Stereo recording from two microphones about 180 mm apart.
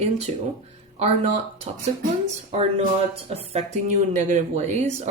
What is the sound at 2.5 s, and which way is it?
Speech, 35° right (ahead or behind).